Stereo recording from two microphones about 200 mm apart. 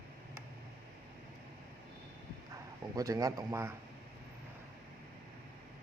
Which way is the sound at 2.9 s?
15° right (ahead or behind).